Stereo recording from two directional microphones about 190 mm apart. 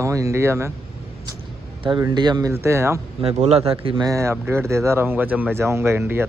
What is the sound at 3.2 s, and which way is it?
Speech, 30° right (ahead or behind).